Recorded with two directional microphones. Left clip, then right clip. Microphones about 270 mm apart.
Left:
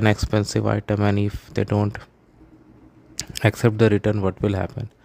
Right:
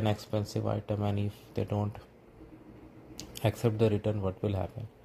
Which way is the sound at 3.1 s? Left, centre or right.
Left.